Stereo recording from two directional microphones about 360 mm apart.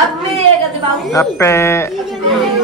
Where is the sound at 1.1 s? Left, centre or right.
Centre.